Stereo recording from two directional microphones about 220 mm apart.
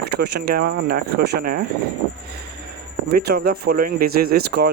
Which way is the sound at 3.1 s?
45° right (ahead or behind).